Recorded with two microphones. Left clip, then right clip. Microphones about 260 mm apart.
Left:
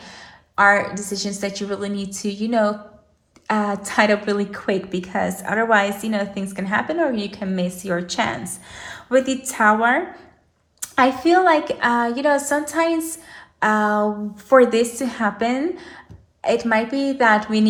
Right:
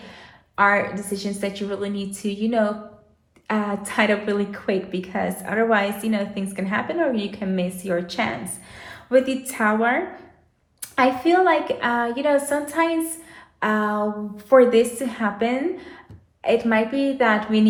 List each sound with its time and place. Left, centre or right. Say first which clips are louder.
0.5 s a woman's voice: left 3 dB; left